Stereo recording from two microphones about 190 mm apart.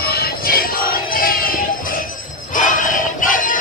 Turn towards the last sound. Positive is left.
turn(degrees=45)  # may be behind; listen again after turning